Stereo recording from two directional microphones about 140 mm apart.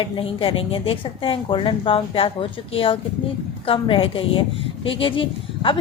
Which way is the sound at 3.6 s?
40° left (ahead or behind).